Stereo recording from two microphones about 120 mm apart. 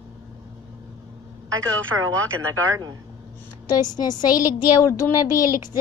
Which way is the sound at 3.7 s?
35° left (ahead or behind).